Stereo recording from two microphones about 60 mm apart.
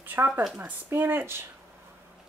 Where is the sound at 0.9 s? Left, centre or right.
Right.